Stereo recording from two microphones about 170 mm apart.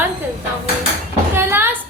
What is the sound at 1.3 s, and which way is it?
Speech, 15° right (ahead or behind).